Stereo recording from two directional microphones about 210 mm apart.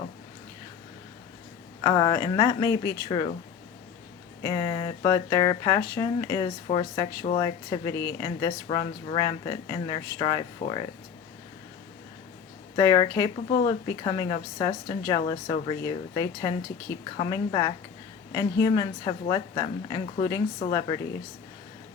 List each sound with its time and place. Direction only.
1.8 s speech: 20° left (ahead or behind)
4.4 s speech: 20° left (ahead or behind)
8.6 s speech: 25° left (ahead or behind)
12.7 s speech: 20° left (ahead or behind)